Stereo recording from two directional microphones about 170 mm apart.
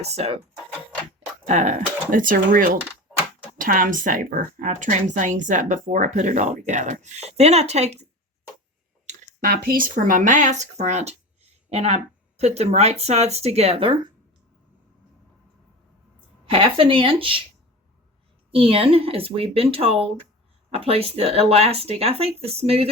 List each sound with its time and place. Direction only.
0.0 s speech: 40° right (ahead or behind)
1.5 s speech: 45° right (ahead or behind)
9.4 s speech: 60° right (ahead or behind); by 14.1 s 30° right (ahead or behind)
16.5 s speech: 30° right (ahead or behind)
18.5 s speech: 35° right (ahead or behind)